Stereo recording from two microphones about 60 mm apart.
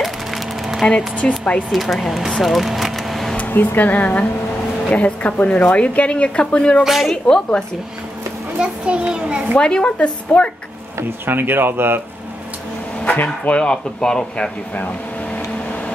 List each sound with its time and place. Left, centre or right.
0.0 s a sound: centre
0.8 s speech: centre
1.7 s speech: centre
2.4 s a sound: centre
3.3 s speech: left
6.8 s speech: centre
7.2 s speech: centre
8.5 s a child's voice: centre
9.6 s speech: centre
11.2 s speech: right
13.0 s speech: left
14.8 s air conditioning: left